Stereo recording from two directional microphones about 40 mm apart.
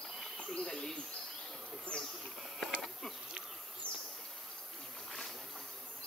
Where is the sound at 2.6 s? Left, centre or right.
Centre.